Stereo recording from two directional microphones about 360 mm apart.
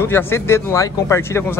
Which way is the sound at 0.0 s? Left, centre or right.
Centre.